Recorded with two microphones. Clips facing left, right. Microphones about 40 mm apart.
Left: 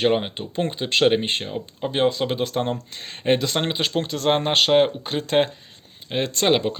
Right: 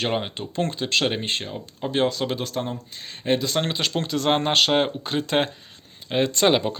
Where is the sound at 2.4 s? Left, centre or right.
Left.